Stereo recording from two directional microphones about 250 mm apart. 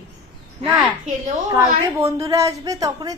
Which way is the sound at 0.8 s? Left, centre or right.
Centre.